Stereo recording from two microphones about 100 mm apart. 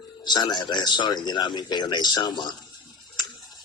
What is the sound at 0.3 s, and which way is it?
A man's voice, 45° left (ahead or behind).